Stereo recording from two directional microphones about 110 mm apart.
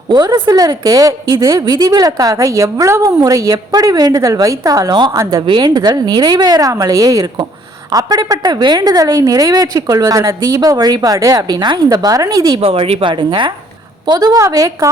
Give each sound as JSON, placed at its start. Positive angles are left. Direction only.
{"t": 0.1, "sound": "a woman's voice", "side_deg": -40}
{"t": 1.5, "sound": "a woman's voice", "side_deg": -40}
{"t": 5.5, "sound": "a woman's voice", "side_deg": -40}
{"t": 12.5, "sound": "a woman's voice", "side_deg": -60}